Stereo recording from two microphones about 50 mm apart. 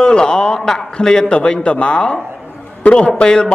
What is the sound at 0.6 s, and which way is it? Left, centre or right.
A man's voice, centre.